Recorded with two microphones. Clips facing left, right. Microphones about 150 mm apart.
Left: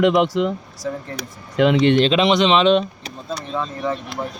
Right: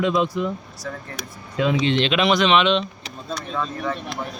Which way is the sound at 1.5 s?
70° left (ahead or behind).